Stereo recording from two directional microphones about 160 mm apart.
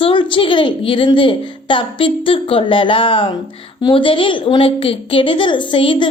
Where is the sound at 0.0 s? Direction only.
30° left (ahead or behind).